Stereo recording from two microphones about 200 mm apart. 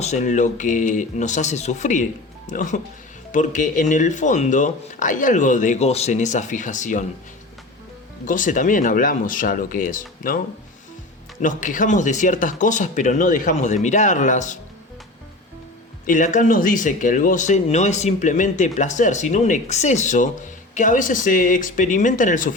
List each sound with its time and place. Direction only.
0.0 s speech: 35° left (ahead or behind)
8.3 s speech: 40° left (ahead or behind)
11.4 s speech: 40° left (ahead or behind)
16.0 s speech: 40° left (ahead or behind)